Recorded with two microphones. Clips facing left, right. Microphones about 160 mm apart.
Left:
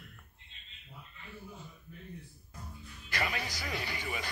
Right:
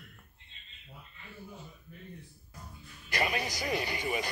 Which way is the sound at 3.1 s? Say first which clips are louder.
Right 4 dB; 15° right (ahead or behind).